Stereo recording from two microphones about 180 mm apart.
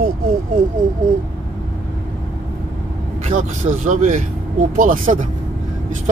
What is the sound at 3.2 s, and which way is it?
Speech, 45° right (ahead or behind).